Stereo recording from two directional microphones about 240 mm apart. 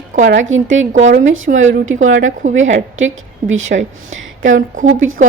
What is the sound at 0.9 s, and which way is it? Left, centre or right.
Speech, right.